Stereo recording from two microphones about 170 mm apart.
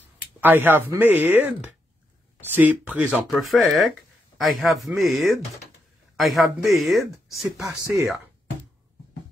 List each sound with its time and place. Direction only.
0.4 s speech: 10° right (ahead or behind)
7.8 s speech: 20° right (ahead or behind)